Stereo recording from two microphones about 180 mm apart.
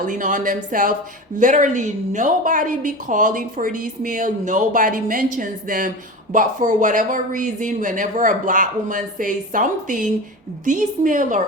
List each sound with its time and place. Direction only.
0.1 s a woman's voice: 45° right (ahead or behind)